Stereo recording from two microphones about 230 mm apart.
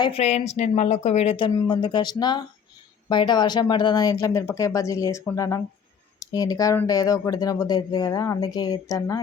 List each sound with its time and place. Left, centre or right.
0.0 s speech: left